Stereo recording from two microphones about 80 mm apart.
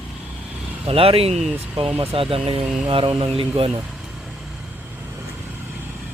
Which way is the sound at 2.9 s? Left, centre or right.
Right.